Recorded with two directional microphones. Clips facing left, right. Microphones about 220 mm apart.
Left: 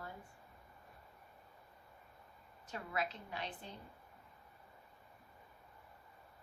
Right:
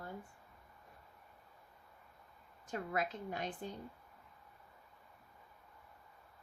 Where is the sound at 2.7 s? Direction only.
50° right (ahead or behind).